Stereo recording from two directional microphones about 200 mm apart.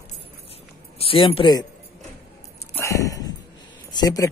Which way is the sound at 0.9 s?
30° left (ahead or behind).